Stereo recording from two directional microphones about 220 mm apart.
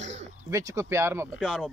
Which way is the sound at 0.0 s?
30° right (ahead or behind).